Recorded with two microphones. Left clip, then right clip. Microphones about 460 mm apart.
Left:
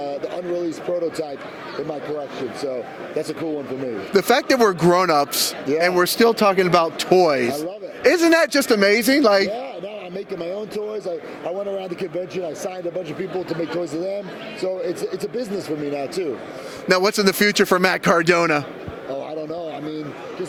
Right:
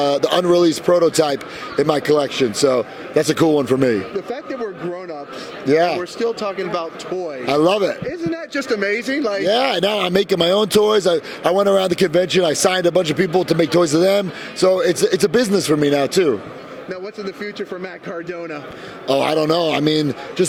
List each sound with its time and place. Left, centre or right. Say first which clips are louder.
0.0 s a man's voice: right 11 dB; right
4.1 s speech: left 9 dB; left
8.5 s speech: left 3 dB; left
9.6 s a man's voice: right 13 dB; right
16.9 s speech: left 12 dB; left
19.0 s a man's voice: right 13 dB; right